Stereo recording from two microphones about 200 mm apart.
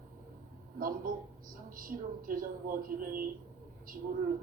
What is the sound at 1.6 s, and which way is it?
Speech, 45° right (ahead or behind).